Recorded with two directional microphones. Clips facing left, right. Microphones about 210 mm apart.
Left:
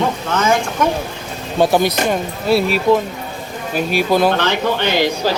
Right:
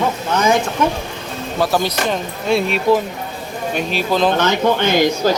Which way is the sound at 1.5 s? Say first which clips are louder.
Left 4 dB; 25° left (ahead or behind).